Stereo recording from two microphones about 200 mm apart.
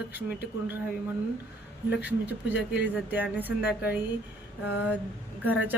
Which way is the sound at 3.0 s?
10° right (ahead or behind).